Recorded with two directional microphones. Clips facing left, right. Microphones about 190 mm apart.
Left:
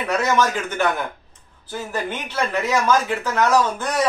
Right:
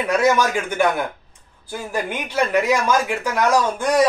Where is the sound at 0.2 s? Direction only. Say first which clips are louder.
Right 2 dB; 10° right (ahead or behind).